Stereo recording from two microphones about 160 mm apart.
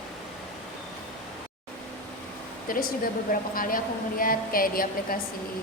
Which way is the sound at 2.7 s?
65° left (ahead or behind).